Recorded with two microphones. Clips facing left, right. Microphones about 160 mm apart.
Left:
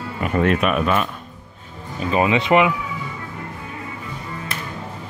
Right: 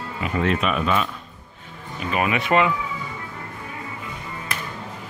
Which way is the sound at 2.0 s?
30° left (ahead or behind).